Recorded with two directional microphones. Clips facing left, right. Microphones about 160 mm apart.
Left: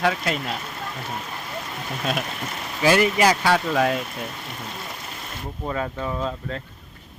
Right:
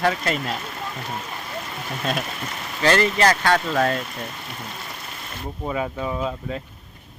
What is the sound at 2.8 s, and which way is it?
Speech, 10° left (ahead or behind).